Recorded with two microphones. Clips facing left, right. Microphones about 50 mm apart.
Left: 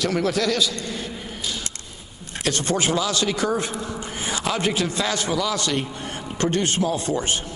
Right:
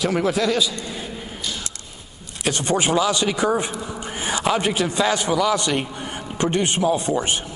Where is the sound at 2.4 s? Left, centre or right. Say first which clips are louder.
Right 2 dB; centre.